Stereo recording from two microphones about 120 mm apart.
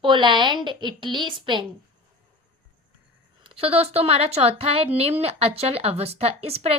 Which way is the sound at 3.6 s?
55° right (ahead or behind).